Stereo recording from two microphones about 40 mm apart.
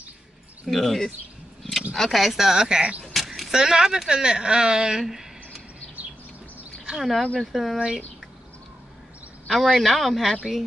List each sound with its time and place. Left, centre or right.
0.7 s speech: centre
1.6 s a sound: centre
2.0 s speech: centre
3.1 s a sound: centre
3.5 s speech: centre
7.0 s speech: centre
9.5 s speech: centre